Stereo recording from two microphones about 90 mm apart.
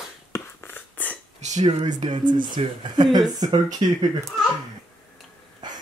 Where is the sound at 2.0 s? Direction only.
60° right (ahead or behind).